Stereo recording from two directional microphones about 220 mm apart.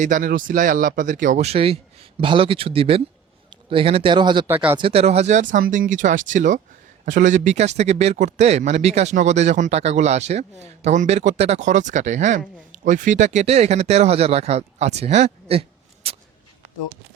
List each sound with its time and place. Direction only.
0.0 s speech: 35° right (ahead or behind); by 4.4 s 20° right (ahead or behind)
4.4 s speech: 10° right (ahead or behind)
4.8 s speech: 25° right (ahead or behind)
16.0 s a sound: 25° right (ahead or behind)